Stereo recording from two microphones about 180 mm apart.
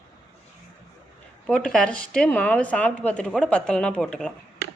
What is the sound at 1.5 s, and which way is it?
Speech, 5° left (ahead or behind).